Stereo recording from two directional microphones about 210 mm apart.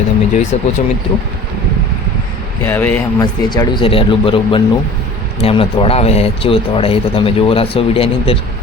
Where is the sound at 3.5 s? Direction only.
20° left (ahead or behind).